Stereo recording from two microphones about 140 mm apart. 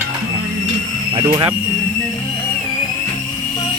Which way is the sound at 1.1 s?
35° right (ahead or behind).